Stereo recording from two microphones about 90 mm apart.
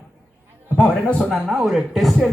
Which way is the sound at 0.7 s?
15° left (ahead or behind).